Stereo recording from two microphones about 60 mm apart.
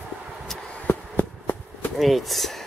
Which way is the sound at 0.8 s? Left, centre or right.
Left.